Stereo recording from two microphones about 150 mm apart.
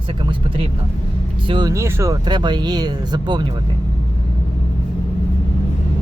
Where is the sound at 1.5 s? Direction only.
30° right (ahead or behind).